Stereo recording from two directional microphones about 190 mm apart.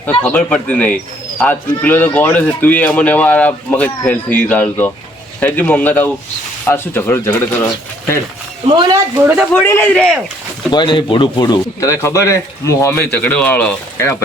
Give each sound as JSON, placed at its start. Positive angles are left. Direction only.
{"t": 0.0, "sound": "speech", "side_deg": 10}
{"t": 8.6, "sound": "speech", "side_deg": -20}
{"t": 9.6, "sound": "a man's voice", "side_deg": 10}
{"t": 10.7, "sound": "speech", "side_deg": 25}